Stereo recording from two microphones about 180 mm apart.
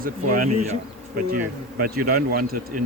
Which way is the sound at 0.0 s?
50° right (ahead or behind).